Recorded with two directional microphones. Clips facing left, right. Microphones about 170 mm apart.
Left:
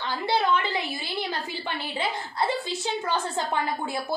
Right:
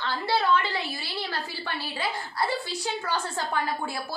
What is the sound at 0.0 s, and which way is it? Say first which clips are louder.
A woman's voice: left 1 dB; 20° left (ahead or behind).